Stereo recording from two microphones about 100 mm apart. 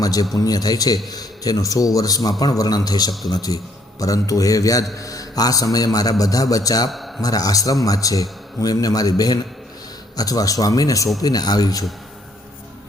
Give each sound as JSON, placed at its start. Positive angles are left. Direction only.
{"t": 0.0, "sound": "a man's voice", "side_deg": 40}